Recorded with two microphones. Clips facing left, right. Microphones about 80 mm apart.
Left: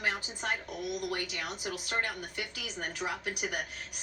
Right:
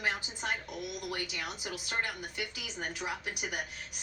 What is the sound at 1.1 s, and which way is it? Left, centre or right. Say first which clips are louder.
Speech: left 2 dB; left.